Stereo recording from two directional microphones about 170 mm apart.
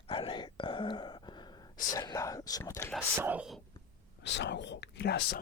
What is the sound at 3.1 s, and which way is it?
Speech, 10° right (ahead or behind).